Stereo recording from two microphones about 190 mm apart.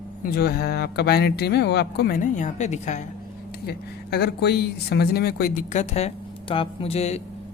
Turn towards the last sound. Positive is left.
turn(degrees=35)  # may be behind; listen again after turning